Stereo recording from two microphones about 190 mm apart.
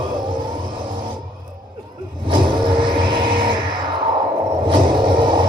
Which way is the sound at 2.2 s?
25° right (ahead or behind).